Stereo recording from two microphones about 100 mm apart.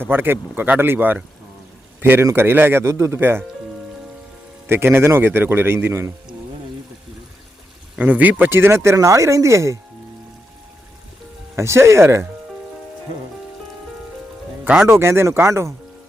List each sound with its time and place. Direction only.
0.0 s speech: 20° right (ahead or behind)
4.6 s speech: 25° right (ahead or behind)
7.9 s speech: 15° right (ahead or behind)
11.5 s speech: 25° right (ahead or behind)
14.8 s speech: 25° right (ahead or behind)